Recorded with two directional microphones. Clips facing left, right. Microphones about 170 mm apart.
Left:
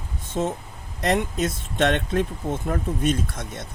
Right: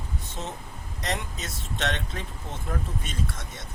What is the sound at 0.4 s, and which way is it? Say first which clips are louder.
Speech: left 13 dB; 55° left (ahead or behind).